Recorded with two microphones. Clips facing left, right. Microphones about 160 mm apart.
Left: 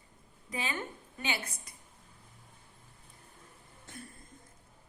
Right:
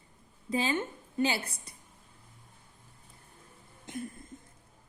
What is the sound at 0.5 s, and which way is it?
A woman's voice, 30° right (ahead or behind).